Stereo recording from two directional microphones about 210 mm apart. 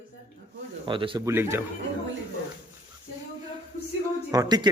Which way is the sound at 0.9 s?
25° right (ahead or behind).